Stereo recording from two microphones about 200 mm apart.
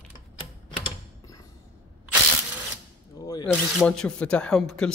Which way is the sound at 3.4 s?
5° left (ahead or behind).